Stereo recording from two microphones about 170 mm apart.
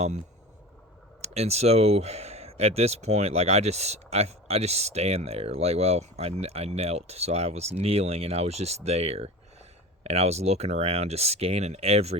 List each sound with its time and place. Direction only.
1.2 s speech: 40° right (ahead or behind)